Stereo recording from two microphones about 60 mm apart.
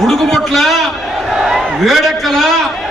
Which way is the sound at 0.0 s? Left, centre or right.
Centre.